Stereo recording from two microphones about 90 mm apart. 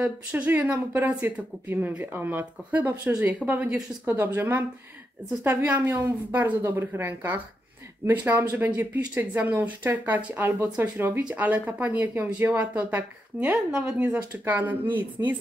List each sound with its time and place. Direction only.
0.0 s speech: 15° right (ahead or behind)